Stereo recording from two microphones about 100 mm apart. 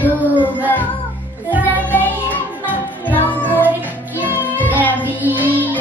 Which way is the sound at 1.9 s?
15° left (ahead or behind).